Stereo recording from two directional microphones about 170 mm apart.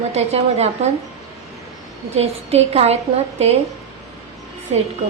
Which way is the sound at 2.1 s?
40° right (ahead or behind).